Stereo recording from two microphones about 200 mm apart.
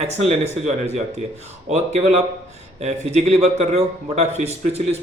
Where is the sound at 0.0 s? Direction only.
30° right (ahead or behind).